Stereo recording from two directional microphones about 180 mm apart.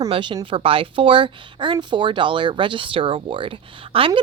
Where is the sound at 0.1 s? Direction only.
25° right (ahead or behind).